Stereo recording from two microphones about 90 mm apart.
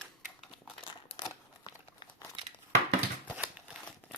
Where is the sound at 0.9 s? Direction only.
65° left (ahead or behind).